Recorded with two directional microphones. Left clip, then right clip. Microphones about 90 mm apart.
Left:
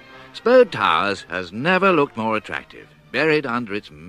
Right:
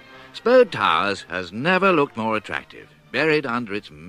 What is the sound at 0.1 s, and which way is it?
Speech, 35° right (ahead or behind).